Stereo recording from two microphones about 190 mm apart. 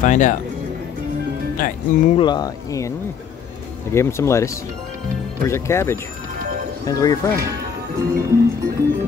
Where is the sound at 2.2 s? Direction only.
20° left (ahead or behind).